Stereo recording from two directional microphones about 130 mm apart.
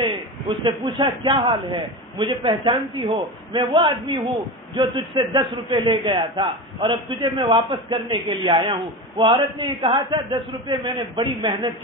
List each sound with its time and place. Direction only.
0.0 s a man's voice: 40° right (ahead or behind)